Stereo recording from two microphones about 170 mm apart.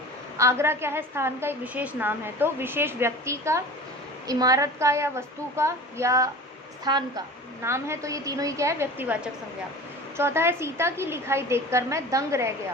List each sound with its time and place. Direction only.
0.3 s a woman's voice: 15° right (ahead or behind)